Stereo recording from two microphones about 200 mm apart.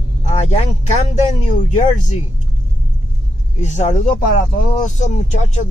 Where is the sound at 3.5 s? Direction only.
35° left (ahead or behind).